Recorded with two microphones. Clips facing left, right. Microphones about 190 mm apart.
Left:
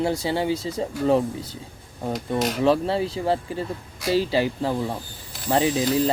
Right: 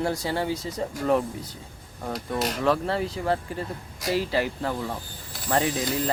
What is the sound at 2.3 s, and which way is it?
Dishes, centre (ahead or behind).